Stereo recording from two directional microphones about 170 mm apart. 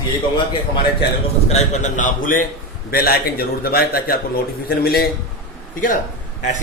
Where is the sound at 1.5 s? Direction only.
45° left (ahead or behind).